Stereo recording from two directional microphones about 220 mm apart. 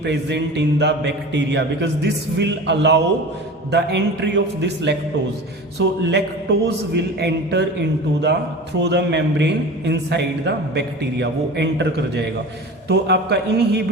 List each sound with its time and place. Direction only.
0.0 s a man's voice: 50° right (ahead or behind)